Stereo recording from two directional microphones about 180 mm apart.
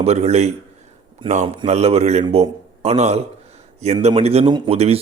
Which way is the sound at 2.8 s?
35° right (ahead or behind).